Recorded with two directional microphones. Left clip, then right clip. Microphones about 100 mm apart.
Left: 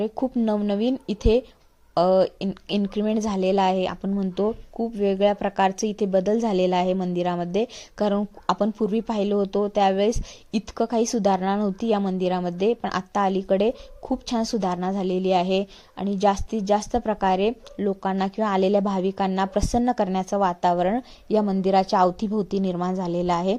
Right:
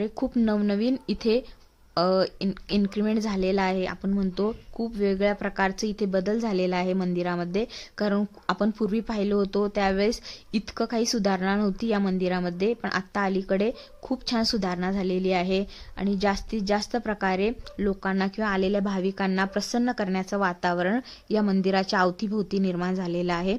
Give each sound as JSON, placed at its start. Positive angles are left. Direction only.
{"t": 0.7, "sound": "a woman's voice", "side_deg": 15}
{"t": 12.9, "sound": "a woman's voice", "side_deg": 30}
{"t": 20.3, "sound": "a woman's voice", "side_deg": 15}